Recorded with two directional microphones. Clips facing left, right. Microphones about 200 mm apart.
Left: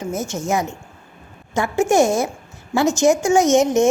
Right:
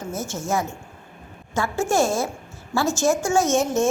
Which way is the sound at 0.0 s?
20° left (ahead or behind).